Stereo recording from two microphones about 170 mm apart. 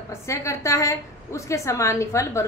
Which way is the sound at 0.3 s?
15° left (ahead or behind).